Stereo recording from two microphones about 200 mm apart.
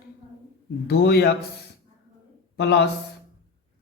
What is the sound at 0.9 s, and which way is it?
Speech, 55° left (ahead or behind).